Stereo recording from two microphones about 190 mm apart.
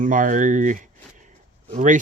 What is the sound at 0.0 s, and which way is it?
Speech, 45° right (ahead or behind).